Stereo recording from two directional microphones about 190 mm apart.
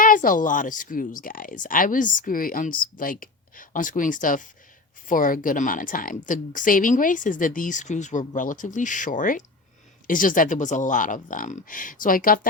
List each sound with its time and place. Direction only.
0.0 s speech: 45° left (ahead or behind)